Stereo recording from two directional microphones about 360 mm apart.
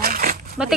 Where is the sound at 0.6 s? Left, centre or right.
Centre.